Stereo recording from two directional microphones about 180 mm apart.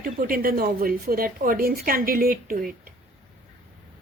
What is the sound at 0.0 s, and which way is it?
Speech, 50° right (ahead or behind).